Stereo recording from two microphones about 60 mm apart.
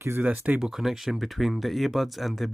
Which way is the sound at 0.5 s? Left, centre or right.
Centre.